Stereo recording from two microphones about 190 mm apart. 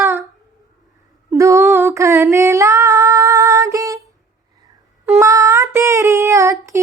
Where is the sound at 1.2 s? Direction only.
15° right (ahead or behind).